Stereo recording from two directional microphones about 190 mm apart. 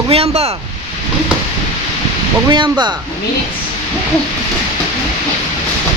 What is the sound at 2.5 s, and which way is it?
Speech, 25° right (ahead or behind).